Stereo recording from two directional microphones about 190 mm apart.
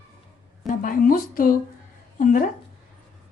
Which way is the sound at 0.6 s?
45° left (ahead or behind).